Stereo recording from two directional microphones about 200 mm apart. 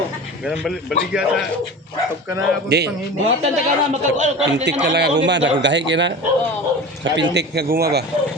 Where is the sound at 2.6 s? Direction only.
55° right (ahead or behind).